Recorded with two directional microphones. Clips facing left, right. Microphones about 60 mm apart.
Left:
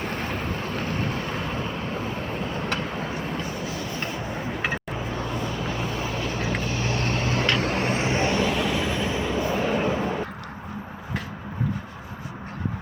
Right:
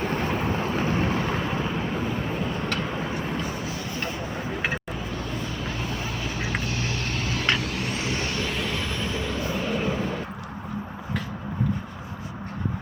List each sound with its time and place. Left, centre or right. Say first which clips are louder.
0.0 s boat: right 3 dB; centre
0.4 s vehicle: right 3 dB; centre
5.6 s vehicle: left 2 dB; centre
6.4 s vehicle: even; centre
6.7 s vehicle: left 3 dB; left
8.4 s vehicle: left 5 dB; centre